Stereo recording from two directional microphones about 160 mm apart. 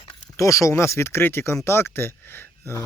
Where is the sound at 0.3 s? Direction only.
20° left (ahead or behind).